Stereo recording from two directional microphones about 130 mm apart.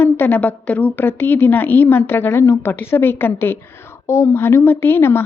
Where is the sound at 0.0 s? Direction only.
15° left (ahead or behind).